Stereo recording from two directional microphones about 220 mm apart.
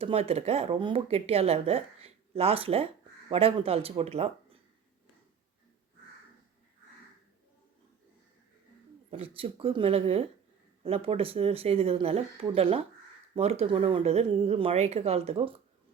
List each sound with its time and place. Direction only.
0.0 s speech: 25° right (ahead or behind)
9.0 s speech: 25° right (ahead or behind)